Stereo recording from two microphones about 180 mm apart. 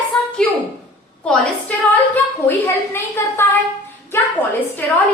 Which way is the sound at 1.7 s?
10° left (ahead or behind).